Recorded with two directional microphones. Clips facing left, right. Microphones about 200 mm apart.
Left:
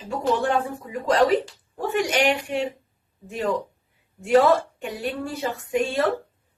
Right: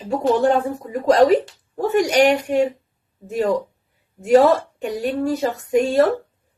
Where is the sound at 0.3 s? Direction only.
40° right (ahead or behind).